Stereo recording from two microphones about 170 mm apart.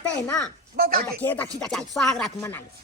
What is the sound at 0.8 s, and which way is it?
Speech, 60° right (ahead or behind).